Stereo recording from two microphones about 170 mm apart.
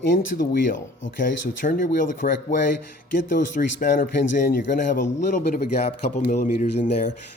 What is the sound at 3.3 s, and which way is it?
Speech, 50° left (ahead or behind).